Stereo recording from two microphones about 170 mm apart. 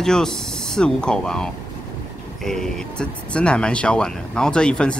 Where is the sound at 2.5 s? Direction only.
5° left (ahead or behind).